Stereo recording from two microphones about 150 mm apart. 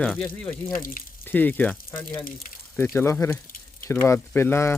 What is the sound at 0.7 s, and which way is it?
Speech, 70° left (ahead or behind).